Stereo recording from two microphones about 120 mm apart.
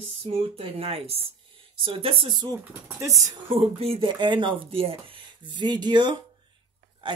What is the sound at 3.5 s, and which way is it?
Speech, 50° right (ahead or behind).